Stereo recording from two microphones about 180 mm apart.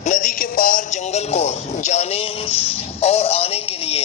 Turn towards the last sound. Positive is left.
turn(degrees=35)  # may be behind; listen again after turning